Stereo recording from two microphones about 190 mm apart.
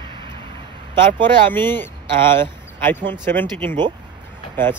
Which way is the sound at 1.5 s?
10° left (ahead or behind).